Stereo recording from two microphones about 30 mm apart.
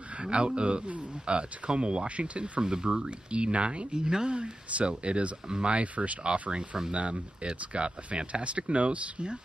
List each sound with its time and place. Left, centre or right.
0.2 s speech: right
2.6 s speech: right
4.3 s speech: right